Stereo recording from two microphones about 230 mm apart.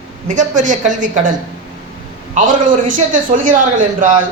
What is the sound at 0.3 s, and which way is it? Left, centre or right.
A man's voice, right.